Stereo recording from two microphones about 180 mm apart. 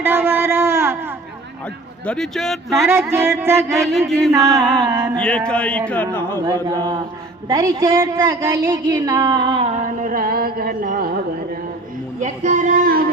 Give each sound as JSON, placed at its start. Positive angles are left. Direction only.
{"t": 0.0, "sound": "a sound", "side_deg": -10}
{"t": 2.0, "sound": "speech", "side_deg": 0}
{"t": 2.8, "sound": "music", "side_deg": -15}
{"t": 4.4, "sound": "speech", "side_deg": 5}
{"t": 4.9, "sound": "music", "side_deg": -15}
{"t": 5.2, "sound": "speech", "side_deg": 5}
{"t": 6.4, "sound": "a woman's voice", "side_deg": -20}
{"t": 12.2, "sound": "a sound", "side_deg": -40}